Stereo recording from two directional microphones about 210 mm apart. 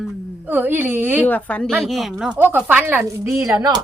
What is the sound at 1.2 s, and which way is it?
Speech, 10° left (ahead or behind).